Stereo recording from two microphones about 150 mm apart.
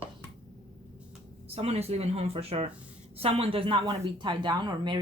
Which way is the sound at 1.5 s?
45° right (ahead or behind).